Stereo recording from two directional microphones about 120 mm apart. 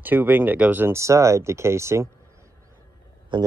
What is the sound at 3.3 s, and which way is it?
Speech, 40° right (ahead or behind).